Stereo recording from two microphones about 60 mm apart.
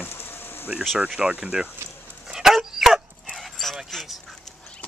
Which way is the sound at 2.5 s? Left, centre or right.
Centre.